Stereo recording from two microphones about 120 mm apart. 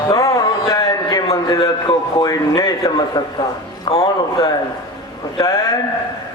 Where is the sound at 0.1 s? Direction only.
30° left (ahead or behind).